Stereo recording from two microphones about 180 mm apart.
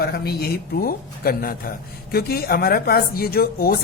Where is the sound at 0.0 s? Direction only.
60° left (ahead or behind).